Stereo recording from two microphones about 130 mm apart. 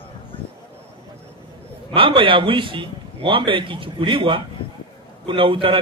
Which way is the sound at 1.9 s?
40° right (ahead or behind).